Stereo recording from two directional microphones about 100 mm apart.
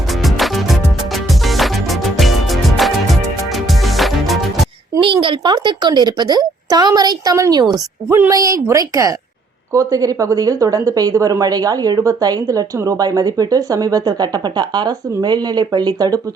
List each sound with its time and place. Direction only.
0.2 s music: centre (ahead or behind)
4.9 s a woman's voice: 60° right (ahead or behind); by 16.2 s 40° right (ahead or behind)